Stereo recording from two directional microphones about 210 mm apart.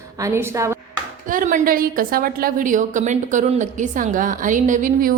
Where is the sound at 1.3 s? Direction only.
40° right (ahead or behind).